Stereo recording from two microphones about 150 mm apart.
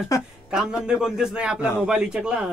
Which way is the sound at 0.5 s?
5° right (ahead or behind).